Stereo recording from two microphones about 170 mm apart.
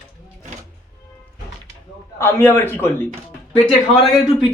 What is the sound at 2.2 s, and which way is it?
Speech, 15° left (ahead or behind).